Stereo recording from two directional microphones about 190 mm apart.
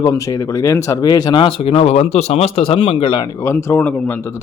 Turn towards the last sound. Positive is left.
turn(degrees=10)  # may be behind; listen again after turning